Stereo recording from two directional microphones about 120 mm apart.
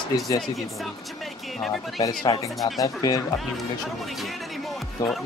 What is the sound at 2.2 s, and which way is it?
Speech, 35° left (ahead or behind).